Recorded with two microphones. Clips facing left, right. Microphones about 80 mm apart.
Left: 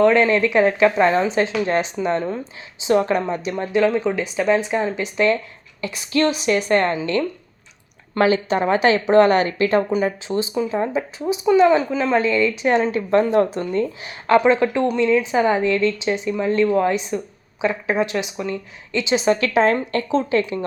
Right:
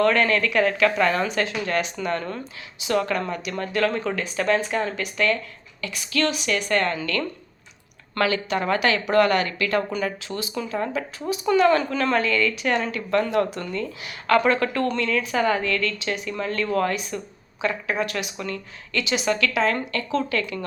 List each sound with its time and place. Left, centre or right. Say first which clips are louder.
0.0 s speech: left 5 dB; left
14.3 s speech: left 4 dB; left